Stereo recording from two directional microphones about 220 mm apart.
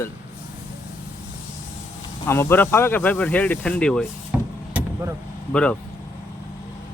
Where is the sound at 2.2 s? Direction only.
10° left (ahead or behind).